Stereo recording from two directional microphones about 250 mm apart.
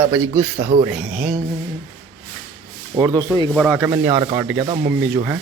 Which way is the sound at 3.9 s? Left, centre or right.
Centre.